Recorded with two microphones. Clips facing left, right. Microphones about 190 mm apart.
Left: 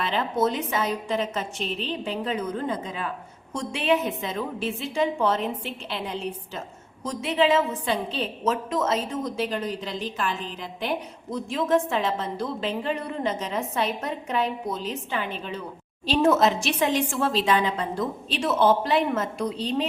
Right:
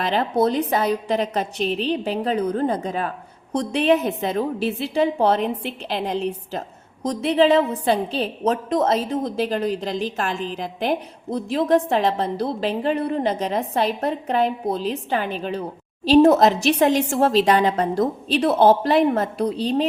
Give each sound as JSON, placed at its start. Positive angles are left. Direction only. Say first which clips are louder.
{"t": 0.2, "sound": "a woman's voice", "louder": "right 5 dB", "side_deg": -35}